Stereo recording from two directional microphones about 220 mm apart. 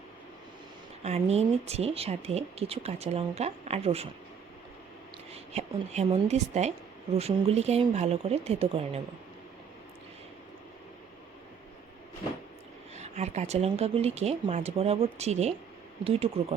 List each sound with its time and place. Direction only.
1.0 s speech: 30° right (ahead or behind)
5.3 s a woman's voice: 30° right (ahead or behind)
13.0 s speech: 30° right (ahead or behind)